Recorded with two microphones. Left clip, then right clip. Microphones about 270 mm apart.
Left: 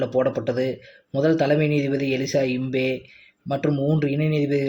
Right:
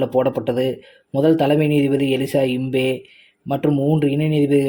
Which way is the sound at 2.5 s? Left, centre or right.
Right.